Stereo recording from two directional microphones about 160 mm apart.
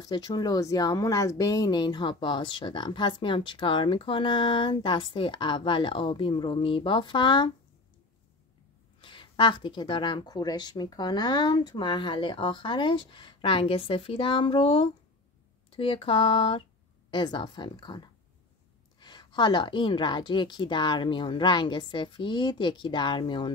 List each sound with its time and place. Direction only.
0.0 s speech: 25° left (ahead or behind)
9.0 s a woman's voice: 30° left (ahead or behind)